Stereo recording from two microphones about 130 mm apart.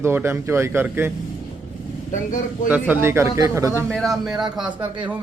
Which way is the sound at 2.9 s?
20° right (ahead or behind).